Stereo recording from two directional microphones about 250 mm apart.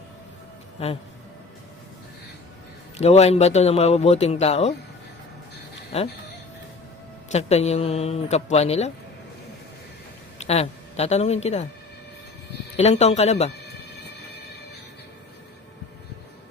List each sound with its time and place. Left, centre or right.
0.8 s speech: left
3.0 s speech: left
5.9 s speech: left
7.3 s speech: left
10.3 s speech: left
12.7 s speech: left